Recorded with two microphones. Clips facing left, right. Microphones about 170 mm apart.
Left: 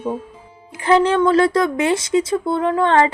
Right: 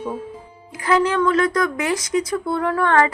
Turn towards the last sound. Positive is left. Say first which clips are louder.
# left 2 dB
turn(degrees=25)  # may be behind; listen again after turning